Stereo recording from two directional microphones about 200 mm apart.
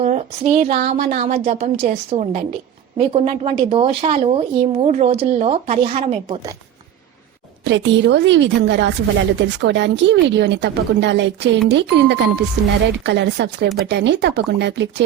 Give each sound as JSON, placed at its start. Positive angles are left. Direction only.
{"t": 0.0, "sound": "speech", "side_deg": -35}
{"t": 7.6, "sound": "a woman's voice", "side_deg": -65}